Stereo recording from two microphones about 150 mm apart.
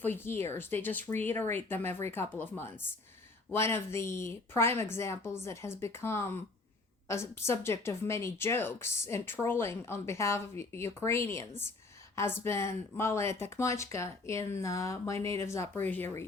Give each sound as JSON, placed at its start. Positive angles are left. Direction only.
{"t": 0.0, "sound": "speech", "side_deg": 15}